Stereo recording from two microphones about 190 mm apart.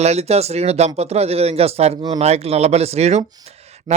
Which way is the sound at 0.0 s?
35° right (ahead or behind).